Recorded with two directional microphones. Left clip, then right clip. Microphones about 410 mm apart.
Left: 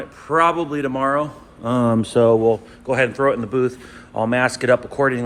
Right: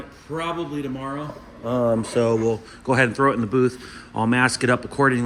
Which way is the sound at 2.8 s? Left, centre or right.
Centre.